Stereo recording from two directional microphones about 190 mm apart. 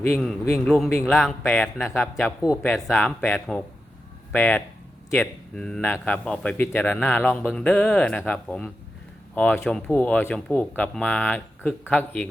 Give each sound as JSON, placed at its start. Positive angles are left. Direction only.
{"t": 0.0, "sound": "a man's voice", "side_deg": 5}